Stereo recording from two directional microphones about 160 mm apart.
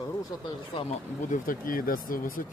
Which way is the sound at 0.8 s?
45° left (ahead or behind).